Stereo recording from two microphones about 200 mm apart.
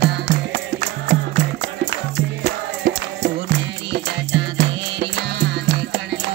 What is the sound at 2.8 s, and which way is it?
Music, 65° right (ahead or behind).